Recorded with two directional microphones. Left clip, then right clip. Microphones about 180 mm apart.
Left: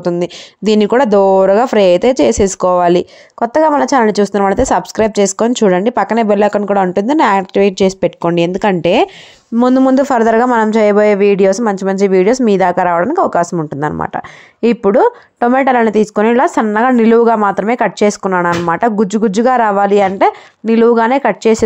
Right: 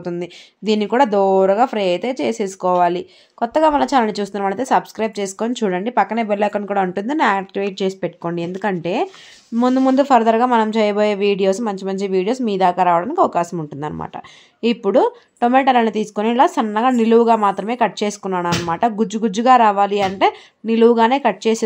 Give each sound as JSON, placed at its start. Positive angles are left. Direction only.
{"t": 0.2, "sound": "a man's voice", "side_deg": 45}
{"t": 9.6, "sound": "a man's voice", "side_deg": 40}